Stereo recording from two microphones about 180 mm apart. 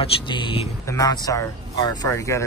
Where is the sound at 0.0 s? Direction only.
30° left (ahead or behind).